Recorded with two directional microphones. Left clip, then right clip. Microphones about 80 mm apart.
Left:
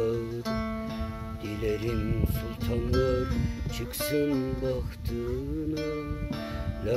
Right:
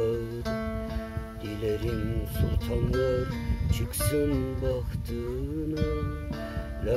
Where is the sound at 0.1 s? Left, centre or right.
Left.